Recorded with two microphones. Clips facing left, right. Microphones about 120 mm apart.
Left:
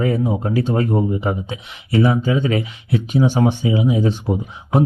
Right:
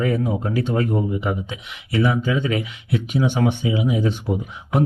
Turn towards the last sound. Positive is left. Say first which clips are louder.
# left 3 dB
turn(degrees=30)  # may be behind; listen again after turning